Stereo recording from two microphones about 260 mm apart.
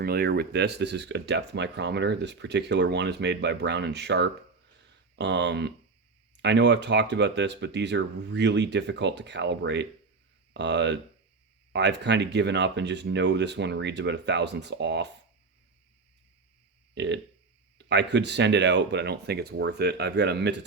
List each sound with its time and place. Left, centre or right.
0.0 s speech: right
16.9 s speech: right